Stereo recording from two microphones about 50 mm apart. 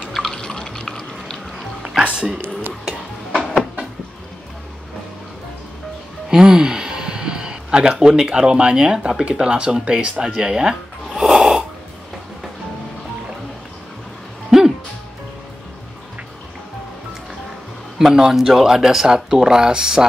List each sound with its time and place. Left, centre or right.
0.1 s drip: centre
0.4 s water: centre
1.8 s music: centre
6.3 s speech: centre
11.1 s snoring: centre
14.5 s music: centre
17.9 s a man's voice: centre